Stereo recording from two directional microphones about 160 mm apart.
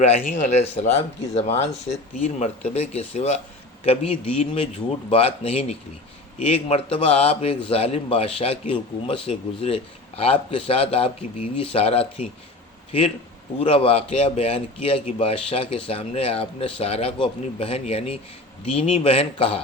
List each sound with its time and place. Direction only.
0.3 s speech: 55° left (ahead or behind)
0.6 s a man's voice: 40° left (ahead or behind)
13.6 s a man's voice: 35° left (ahead or behind)